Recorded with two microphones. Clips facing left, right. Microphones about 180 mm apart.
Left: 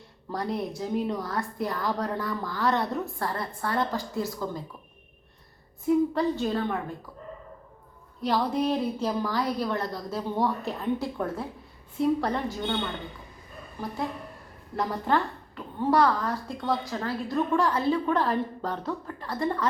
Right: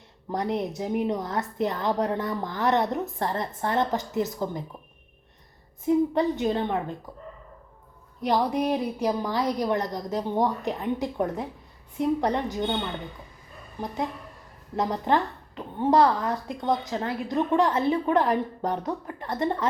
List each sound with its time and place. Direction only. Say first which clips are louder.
0.3 s a woman's voice: right 3 dB; 20° right (ahead or behind)
5.8 s a woman's voice: right 1 dB; 20° right (ahead or behind)
8.2 s a woman's voice: right 2 dB; 15° right (ahead or behind)
13.8 s a woman's voice: right 1 dB; 20° right (ahead or behind)